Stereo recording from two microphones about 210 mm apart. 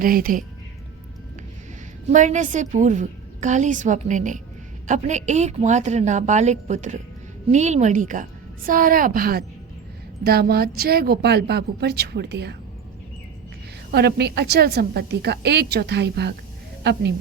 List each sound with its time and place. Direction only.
0.0 s a woman's voice: 40° right (ahead or behind)
2.0 s a woman's voice: 35° right (ahead or behind); by 12.5 s 50° right (ahead or behind)
13.9 s a woman's voice: 50° right (ahead or behind)